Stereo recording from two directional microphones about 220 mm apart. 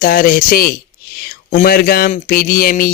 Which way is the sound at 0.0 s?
40° left (ahead or behind).